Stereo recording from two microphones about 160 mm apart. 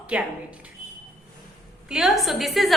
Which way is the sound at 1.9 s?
Centre (ahead or behind).